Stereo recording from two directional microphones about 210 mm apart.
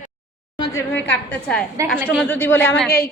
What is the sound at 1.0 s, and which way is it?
A woman's voice, 5° left (ahead or behind).